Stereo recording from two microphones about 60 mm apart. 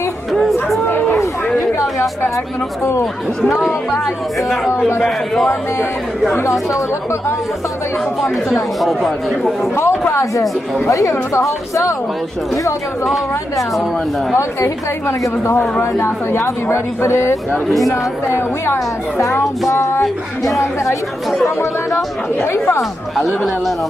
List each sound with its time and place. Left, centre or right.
0.3 s chatter: centre
0.8 s a sound: left
4.0 s speech: centre
4.6 s a woman's voice: left
5.0 s speech: centre
6.7 s a woman's voice: left
8.8 s speech: centre
9.8 s a woman's voice: left
10.9 s speech: left
13.1 s speech: centre
14.3 s a woman's voice: left
17.6 s speech: centre
18.3 s a woman's voice: left
21.4 s a woman's voice: left